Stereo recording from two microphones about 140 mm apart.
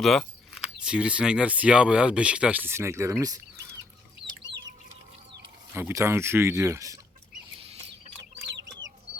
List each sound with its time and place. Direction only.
0.0 s speech: centre (ahead or behind); by 3.4 s 25° right (ahead or behind)
4.5 s chicken: 35° right (ahead or behind)
5.7 s speech: 20° right (ahead or behind)